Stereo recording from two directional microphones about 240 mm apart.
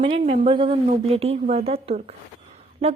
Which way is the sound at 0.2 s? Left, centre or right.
Right.